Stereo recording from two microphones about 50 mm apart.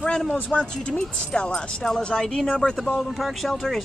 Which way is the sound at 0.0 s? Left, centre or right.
Centre.